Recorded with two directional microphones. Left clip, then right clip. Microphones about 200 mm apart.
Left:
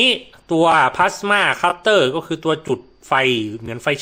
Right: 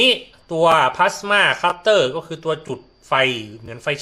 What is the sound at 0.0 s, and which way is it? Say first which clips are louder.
Speech: even; 55° left (ahead or behind).